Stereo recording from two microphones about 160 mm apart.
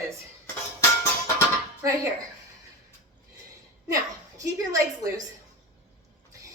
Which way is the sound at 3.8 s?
20° right (ahead or behind).